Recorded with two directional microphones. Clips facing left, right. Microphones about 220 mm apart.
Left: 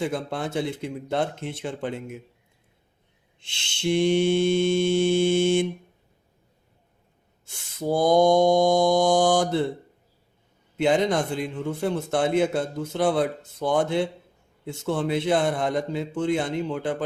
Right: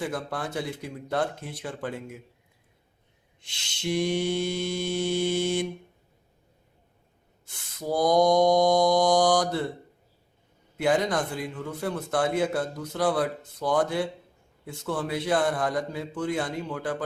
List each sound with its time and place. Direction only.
0.0 s a man's voice: 25° left (ahead or behind)
3.4 s a man's voice: 30° left (ahead or behind)
7.4 s a man's voice: 25° left (ahead or behind)
10.8 s a man's voice: 25° left (ahead or behind)